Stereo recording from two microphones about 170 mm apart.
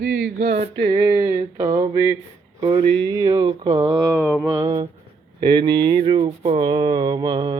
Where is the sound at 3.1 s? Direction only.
20° right (ahead or behind).